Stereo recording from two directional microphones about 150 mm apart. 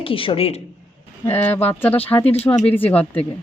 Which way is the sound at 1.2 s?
15° left (ahead or behind).